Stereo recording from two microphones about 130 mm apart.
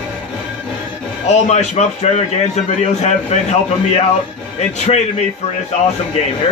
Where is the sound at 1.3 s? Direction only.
60° left (ahead or behind).